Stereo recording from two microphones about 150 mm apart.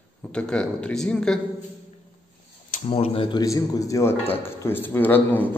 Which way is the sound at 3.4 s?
20° left (ahead or behind).